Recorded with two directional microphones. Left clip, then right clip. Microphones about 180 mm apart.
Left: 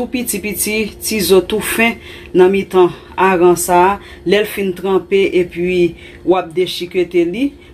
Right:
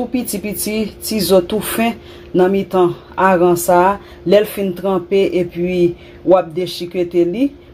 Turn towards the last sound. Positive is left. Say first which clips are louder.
# left 1 dB
turn(degrees=-40)  # may be behind; listen again after turning